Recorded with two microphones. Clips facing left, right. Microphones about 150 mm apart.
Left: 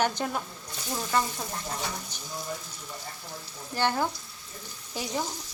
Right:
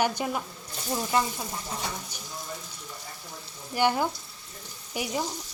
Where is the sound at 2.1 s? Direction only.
10° right (ahead or behind).